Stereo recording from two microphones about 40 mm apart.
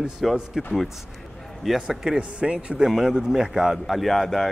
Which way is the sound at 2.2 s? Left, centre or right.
Right.